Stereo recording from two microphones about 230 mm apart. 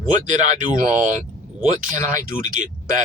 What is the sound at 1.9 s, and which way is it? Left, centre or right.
Speech, right.